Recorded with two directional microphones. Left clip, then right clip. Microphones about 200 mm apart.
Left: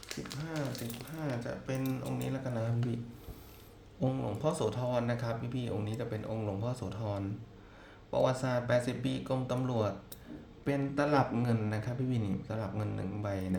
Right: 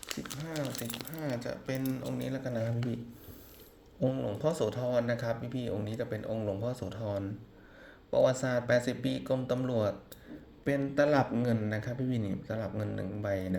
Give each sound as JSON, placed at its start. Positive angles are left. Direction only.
{"t": 1.1, "sound": "speech", "side_deg": -30}
{"t": 4.0, "sound": "speech", "side_deg": -15}